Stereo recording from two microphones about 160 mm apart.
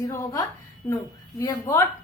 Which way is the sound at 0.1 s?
20° left (ahead or behind).